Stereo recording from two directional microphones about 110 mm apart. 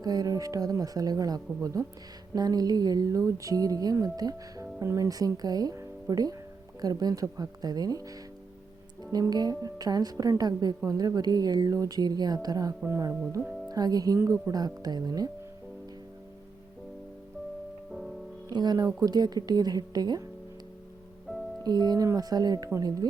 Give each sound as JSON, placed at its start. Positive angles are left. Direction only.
{"t": 0.0, "sound": "speech", "side_deg": -35}
{"t": 9.1, "sound": "speech", "side_deg": -35}
{"t": 17.9, "sound": "music", "side_deg": 0}
{"t": 18.5, "sound": "speech", "side_deg": -40}
{"t": 21.3, "sound": "music", "side_deg": 5}
{"t": 21.6, "sound": "speech", "side_deg": -40}